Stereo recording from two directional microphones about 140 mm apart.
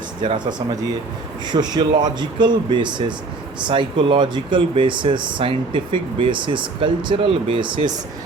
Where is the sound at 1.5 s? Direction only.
30° right (ahead or behind).